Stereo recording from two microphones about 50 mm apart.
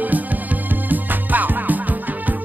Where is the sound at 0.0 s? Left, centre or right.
Right.